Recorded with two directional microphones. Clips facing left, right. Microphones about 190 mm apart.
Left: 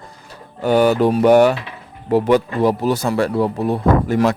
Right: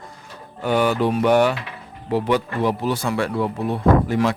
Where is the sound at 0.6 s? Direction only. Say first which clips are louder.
Left 5 dB; 40° left (ahead or behind).